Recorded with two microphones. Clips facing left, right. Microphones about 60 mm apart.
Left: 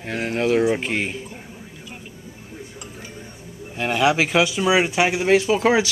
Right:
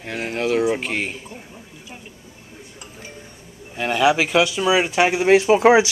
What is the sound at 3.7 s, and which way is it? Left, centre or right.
Speech, centre.